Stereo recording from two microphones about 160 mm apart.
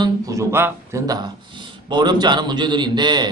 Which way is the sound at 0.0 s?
20° right (ahead or behind).